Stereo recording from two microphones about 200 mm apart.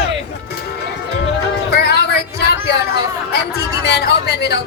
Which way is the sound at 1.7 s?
55° left (ahead or behind).